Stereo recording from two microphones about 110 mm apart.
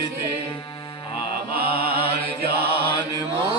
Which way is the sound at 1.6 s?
65° left (ahead or behind).